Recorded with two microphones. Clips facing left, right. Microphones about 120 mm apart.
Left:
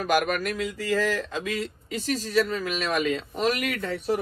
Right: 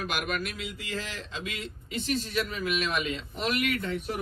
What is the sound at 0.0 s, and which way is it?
Speech, 45° left (ahead or behind).